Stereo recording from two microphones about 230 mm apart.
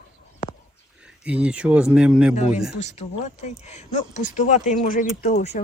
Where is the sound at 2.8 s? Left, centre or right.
Left.